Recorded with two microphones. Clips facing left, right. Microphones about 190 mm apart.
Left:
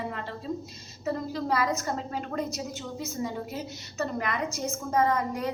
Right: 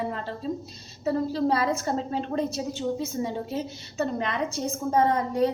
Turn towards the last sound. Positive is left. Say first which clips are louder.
# right 4 dB
turn(degrees=-30)  # may be behind; listen again after turning